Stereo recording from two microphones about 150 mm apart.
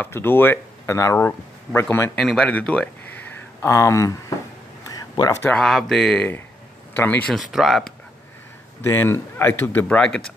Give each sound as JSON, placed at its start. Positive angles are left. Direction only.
{"t": 0.0, "sound": "speech", "side_deg": 15}
{"t": 2.1, "sound": "speech", "side_deg": 5}
{"t": 3.6, "sound": "speech", "side_deg": 20}
{"t": 5.1, "sound": "speech", "side_deg": 25}
{"t": 5.4, "sound": "speech", "side_deg": 5}
{"t": 7.3, "sound": "speech", "side_deg": 0}
{"t": 8.8, "sound": "speech", "side_deg": 15}